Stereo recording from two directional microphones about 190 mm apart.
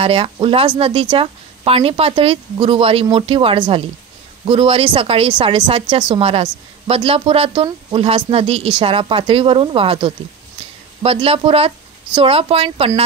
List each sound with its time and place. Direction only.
0.0 s speech: 30° right (ahead or behind)